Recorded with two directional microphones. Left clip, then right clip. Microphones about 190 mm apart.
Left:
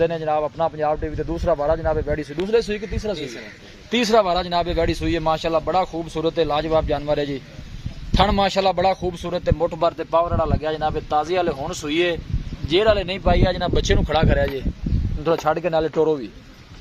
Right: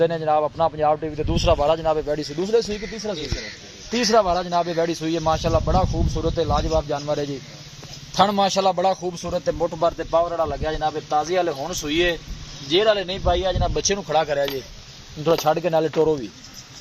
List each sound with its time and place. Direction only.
0.0 s speech: centre (ahead or behind)
2.3 s speech: 5° left (ahead or behind)
4.1 s speech: 20° left (ahead or behind)
5.2 s speech: 25° left (ahead or behind)
5.5 s speech: 10° left (ahead or behind); by 7.3 s 30° left (ahead or behind)
8.2 s speech: 15° left (ahead or behind)
12.7 s speech: 15° left (ahead or behind)
13.2 s speech: 25° left (ahead or behind)
15.4 s speech: centre (ahead or behind)